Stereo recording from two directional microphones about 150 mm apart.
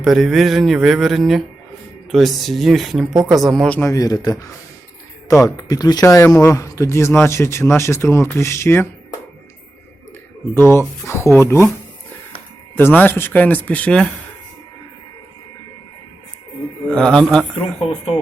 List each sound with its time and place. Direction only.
0.0 s speech: centre (ahead or behind)
3.8 s speech: 20° left (ahead or behind)
5.5 s speech: 25° left (ahead or behind)
10.5 s speech: 15° left (ahead or behind)
12.7 s speech: 10° left (ahead or behind)
16.9 s speech: 5° left (ahead or behind)